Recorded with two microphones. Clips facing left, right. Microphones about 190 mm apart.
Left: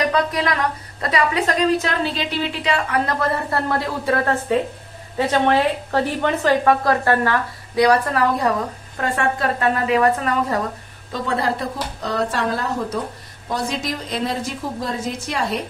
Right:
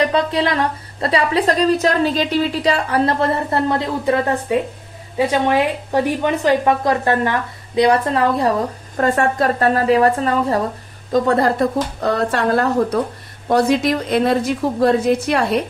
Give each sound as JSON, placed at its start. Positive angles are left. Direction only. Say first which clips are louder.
{"t": 0.1, "sound": "a woman's voice", "louder": "right 3 dB", "side_deg": -30}
{"t": 11.1, "sound": "a woman's voice", "louder": "right 7 dB", "side_deg": -45}
{"t": 12.0, "sound": "a woman's voice", "louder": "right 3 dB", "side_deg": -60}